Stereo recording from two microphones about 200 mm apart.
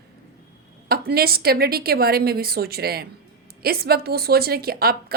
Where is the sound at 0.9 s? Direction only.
50° right (ahead or behind).